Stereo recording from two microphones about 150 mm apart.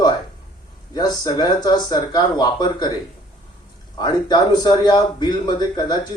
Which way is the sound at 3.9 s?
30° left (ahead or behind).